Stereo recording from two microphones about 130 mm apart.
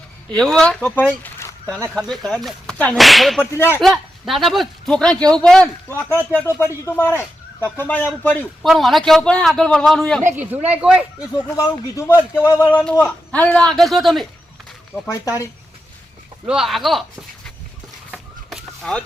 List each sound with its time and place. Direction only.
0.3 s a man's voice: 5° left (ahead or behind)
3.4 s a man's voice: 20° left (ahead or behind)
3.8 s a woman's voice: centre (ahead or behind)
8.6 s a man's voice: centre (ahead or behind)
10.2 s speech: 15° right (ahead or behind)
11.5 s a man's voice: 25° left (ahead or behind)
12.5 s a man's voice: 10° left (ahead or behind)
15.1 s a man's voice: 25° left (ahead or behind)
16.5 s a man's voice: centre (ahead or behind)
18.1 s fowl: 5° right (ahead or behind)